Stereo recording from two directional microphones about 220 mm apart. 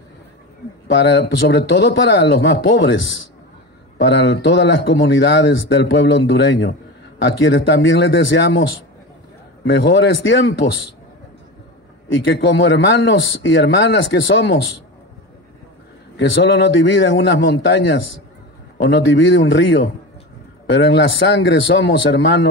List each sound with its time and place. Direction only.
0.9 s speech: 50° left (ahead or behind)
4.0 s a man's voice: 50° left (ahead or behind)
9.7 s speech: 55° left (ahead or behind)
12.3 s a man's voice: 50° left (ahead or behind)
16.2 s a man's voice: 55° left (ahead or behind)